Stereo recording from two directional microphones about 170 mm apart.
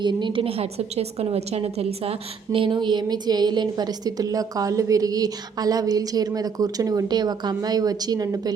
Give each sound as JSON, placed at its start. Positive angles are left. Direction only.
{"t": 0.0, "sound": "a woman's voice", "side_deg": -25}